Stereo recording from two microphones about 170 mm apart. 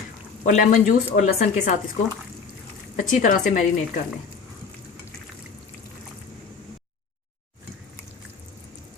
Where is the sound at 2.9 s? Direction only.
50° left (ahead or behind).